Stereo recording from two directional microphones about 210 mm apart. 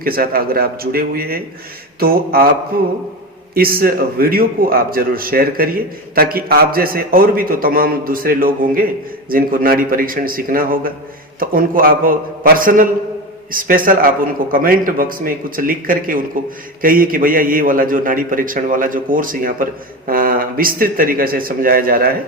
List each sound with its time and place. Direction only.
0.0 s a man's voice: 45° right (ahead or behind)
3.5 s a man's voice: 45° right (ahead or behind)